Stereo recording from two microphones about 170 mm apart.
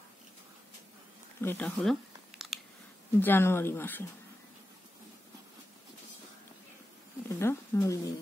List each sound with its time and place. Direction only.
1.4 s speech: 10° left (ahead or behind)
1.8 s a sound: centre (ahead or behind)
3.2 s speech: 10° left (ahead or behind)
7.2 s speech: 15° left (ahead or behind)